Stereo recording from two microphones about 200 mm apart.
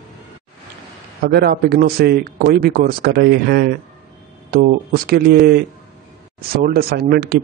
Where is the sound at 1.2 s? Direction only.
50° right (ahead or behind).